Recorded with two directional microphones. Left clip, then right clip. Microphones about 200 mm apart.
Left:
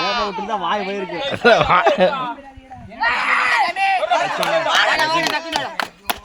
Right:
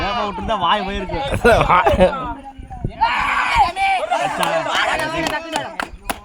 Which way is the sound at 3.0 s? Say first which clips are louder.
Even; centre (ahead or behind).